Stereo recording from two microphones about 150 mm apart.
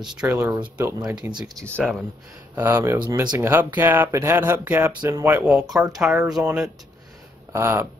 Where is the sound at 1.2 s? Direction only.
30° right (ahead or behind).